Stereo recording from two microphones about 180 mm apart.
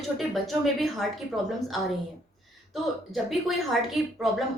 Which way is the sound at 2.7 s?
Centre (ahead or behind).